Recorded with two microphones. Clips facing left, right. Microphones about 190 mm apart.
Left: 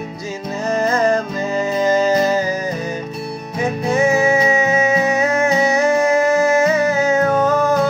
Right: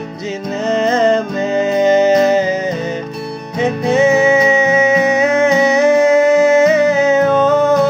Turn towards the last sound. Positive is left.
turn(degrees=-20)  # may be behind; listen again after turning